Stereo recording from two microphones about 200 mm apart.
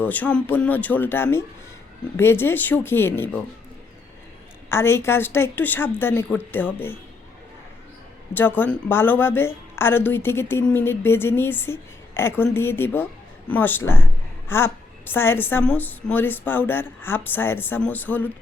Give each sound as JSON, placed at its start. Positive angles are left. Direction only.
{"t": 0.0, "sound": "a woman's voice", "side_deg": 10}
{"t": 4.7, "sound": "a woman's voice", "side_deg": 10}
{"t": 8.3, "sound": "a woman's voice", "side_deg": 10}